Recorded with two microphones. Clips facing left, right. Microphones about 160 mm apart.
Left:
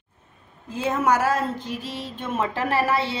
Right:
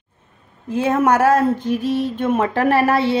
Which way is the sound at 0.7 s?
60° right (ahead or behind).